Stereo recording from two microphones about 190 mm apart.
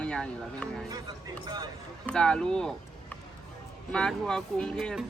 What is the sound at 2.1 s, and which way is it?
Speech, 5° left (ahead or behind).